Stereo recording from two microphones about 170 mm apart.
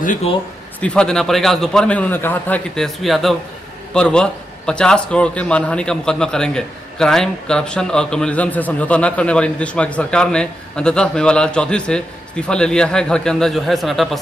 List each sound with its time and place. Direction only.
0.7 s a man's voice: 5° left (ahead or behind)